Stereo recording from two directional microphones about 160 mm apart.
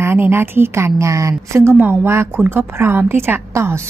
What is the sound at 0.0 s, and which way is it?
A woman's voice, 15° right (ahead or behind).